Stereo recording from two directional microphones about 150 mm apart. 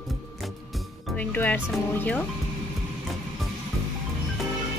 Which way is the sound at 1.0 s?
10° left (ahead or behind).